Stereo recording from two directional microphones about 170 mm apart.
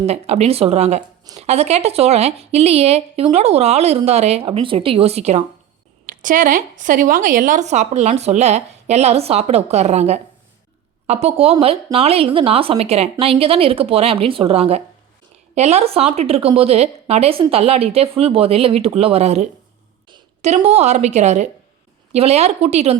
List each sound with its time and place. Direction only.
0.0 s speech: 40° right (ahead or behind)
6.2 s a woman's voice: 50° right (ahead or behind)